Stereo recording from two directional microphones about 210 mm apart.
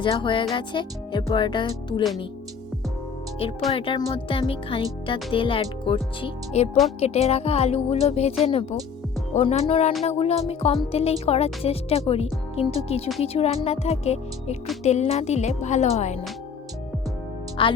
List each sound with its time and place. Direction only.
0.0 s speech: 25° left (ahead or behind)
3.7 s speech: 25° left (ahead or behind)
17.6 s speech: 25° left (ahead or behind)